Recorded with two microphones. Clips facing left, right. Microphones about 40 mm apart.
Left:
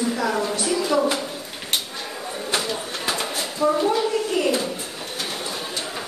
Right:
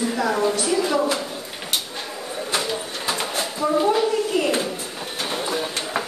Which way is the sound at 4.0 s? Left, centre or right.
Centre.